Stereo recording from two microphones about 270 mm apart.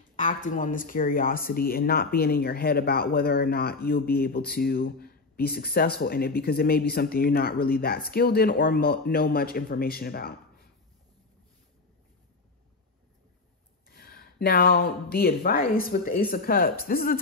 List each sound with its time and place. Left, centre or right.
0.1 s speech: left
13.8 s speech: left